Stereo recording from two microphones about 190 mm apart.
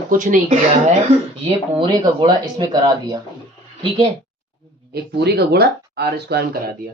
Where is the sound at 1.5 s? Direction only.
25° right (ahead or behind).